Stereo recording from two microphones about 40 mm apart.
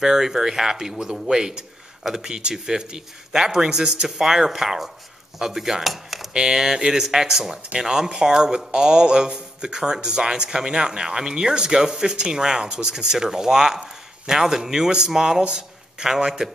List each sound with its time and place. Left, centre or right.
0.0 s speech: centre
6.3 s a man's voice: centre